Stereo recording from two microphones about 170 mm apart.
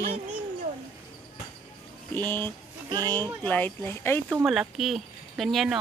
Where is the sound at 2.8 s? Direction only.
25° right (ahead or behind).